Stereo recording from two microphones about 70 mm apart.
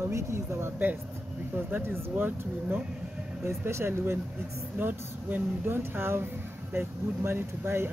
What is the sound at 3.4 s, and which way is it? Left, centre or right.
Speech, right.